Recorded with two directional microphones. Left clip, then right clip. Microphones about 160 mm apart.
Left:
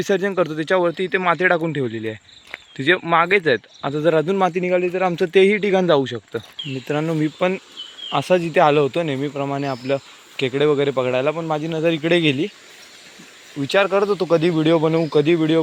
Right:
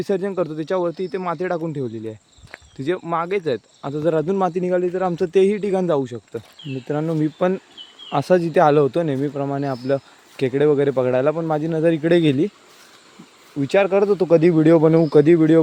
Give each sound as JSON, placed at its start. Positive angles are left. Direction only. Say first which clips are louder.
{"t": 0.0, "sound": "a man's voice", "louder": "left 3 dB", "side_deg": -10}
{"t": 7.3, "sound": "speech", "louder": "right 1 dB", "side_deg": -30}
{"t": 8.1, "sound": "speech", "louder": "even", "side_deg": -45}
{"t": 9.1, "sound": "speech", "louder": "even", "side_deg": -35}
{"t": 13.7, "sound": "speech", "louder": "right 1 dB", "side_deg": -55}